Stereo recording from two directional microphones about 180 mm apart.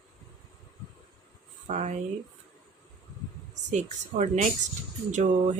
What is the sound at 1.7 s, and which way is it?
Speech, 45° right (ahead or behind).